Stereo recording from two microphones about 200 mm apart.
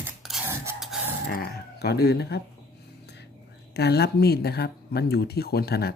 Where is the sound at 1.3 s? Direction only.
50° left (ahead or behind).